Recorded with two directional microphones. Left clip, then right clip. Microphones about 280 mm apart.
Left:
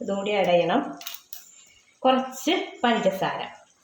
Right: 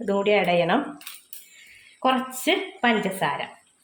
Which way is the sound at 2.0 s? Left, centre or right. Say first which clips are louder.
Left 1 dB; right.